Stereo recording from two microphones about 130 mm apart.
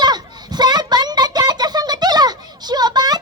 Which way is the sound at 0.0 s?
30° right (ahead or behind).